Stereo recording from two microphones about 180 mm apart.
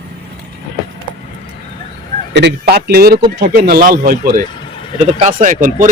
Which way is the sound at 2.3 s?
65° right (ahead or behind).